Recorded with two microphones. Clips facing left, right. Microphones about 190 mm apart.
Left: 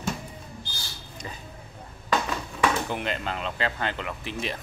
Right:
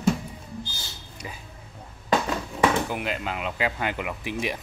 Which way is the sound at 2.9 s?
5° right (ahead or behind).